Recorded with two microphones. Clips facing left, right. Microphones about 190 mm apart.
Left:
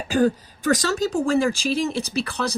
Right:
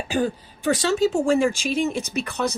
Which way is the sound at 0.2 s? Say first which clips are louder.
Left 5 dB; 40° left (ahead or behind).